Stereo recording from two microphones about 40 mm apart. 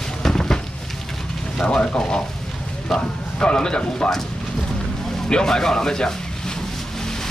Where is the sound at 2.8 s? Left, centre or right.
Centre.